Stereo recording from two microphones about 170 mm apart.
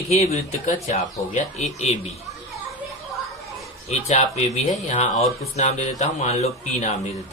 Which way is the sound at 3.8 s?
40° left (ahead or behind).